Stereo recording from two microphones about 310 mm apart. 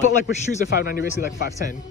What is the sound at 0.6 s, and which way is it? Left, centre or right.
Speech, left.